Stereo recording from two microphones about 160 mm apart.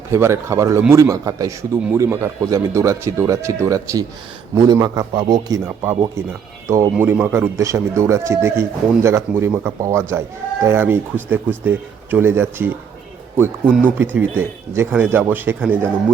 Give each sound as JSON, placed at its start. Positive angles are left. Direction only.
{"t": 0.1, "sound": "speech", "side_deg": -15}
{"t": 5.6, "sound": "a man's voice", "side_deg": -15}